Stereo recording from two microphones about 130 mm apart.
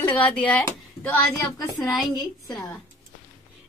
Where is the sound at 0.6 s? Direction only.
20° left (ahead or behind).